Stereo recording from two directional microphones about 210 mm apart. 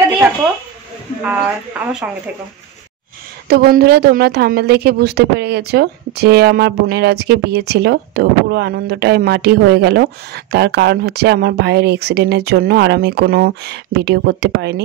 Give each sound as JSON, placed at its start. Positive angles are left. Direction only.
{"t": 1.2, "sound": "speech", "side_deg": -5}
{"t": 3.4, "sound": "a woman's voice", "side_deg": -45}